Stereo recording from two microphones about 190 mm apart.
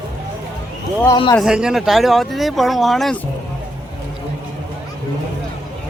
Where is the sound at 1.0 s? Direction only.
20° left (ahead or behind).